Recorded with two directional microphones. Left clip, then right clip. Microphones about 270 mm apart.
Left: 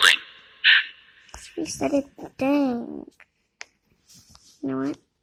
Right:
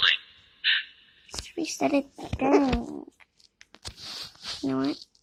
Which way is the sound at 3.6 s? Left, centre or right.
Left.